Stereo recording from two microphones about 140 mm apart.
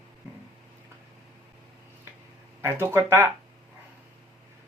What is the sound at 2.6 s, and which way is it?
Speech, 15° right (ahead or behind).